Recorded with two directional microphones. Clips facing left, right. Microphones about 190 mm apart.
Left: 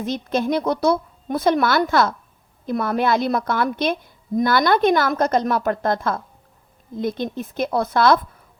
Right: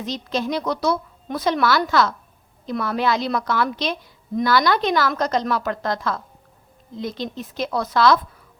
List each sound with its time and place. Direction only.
0.0 s a woman's voice: 50° left (ahead or behind)